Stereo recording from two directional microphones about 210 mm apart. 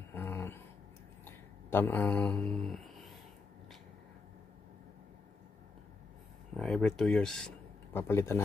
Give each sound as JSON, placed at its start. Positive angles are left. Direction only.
{"t": 0.1, "sound": "a sound", "side_deg": 10}
{"t": 1.2, "sound": "mantra", "side_deg": 10}
{"t": 6.5, "sound": "speech", "side_deg": 5}